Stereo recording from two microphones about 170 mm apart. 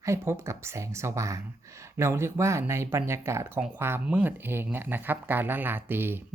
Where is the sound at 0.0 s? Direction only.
15° right (ahead or behind).